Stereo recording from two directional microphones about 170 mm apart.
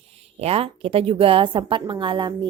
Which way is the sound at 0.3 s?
35° right (ahead or behind).